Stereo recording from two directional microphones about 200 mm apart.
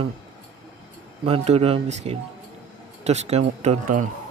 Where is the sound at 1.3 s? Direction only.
30° right (ahead or behind).